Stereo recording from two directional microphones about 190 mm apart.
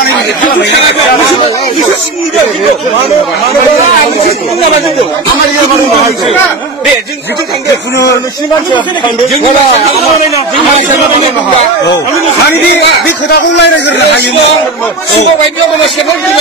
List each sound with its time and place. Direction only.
13.3 s a man's voice: 65° left (ahead or behind)